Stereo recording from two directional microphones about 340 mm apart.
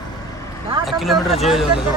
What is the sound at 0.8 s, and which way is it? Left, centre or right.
Speech, centre.